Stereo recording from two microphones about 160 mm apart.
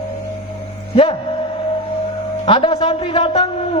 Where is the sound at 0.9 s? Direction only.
30° left (ahead or behind).